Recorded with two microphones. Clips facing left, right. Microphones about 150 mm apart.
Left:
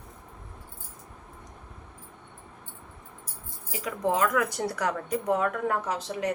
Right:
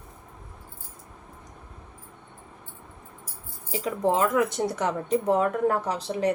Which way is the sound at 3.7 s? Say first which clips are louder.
Right 3 dB; 30° right (ahead or behind).